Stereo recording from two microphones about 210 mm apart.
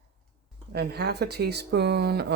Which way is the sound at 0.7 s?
50° right (ahead or behind).